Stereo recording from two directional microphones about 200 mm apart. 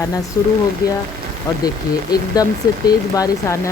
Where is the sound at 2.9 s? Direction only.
20° left (ahead or behind).